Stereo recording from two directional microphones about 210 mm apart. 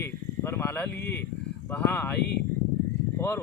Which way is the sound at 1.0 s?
50° left (ahead or behind).